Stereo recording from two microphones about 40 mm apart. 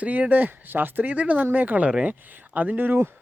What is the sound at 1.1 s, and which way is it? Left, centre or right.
Speech, right.